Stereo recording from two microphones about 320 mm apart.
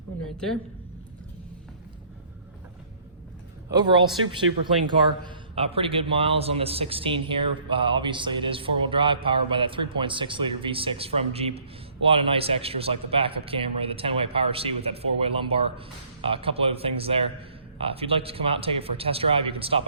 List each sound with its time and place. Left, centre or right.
0.3 s a woman's voice: centre
3.7 s a man's voice: centre
5.2 s a man's voice: centre